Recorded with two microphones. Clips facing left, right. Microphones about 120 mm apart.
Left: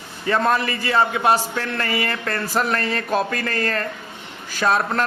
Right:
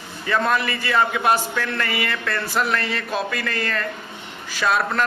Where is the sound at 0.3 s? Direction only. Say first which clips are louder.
Left 2 dB; 35° left (ahead or behind).